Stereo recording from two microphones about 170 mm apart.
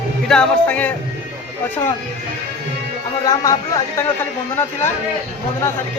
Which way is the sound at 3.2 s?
20° left (ahead or behind).